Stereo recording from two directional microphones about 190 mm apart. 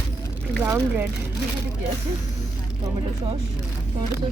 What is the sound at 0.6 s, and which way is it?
Speech, 10° right (ahead or behind).